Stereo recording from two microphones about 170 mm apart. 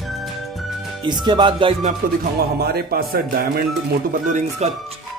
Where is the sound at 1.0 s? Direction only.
25° right (ahead or behind).